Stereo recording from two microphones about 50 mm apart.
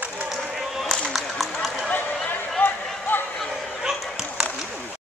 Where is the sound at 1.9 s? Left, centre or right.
Left.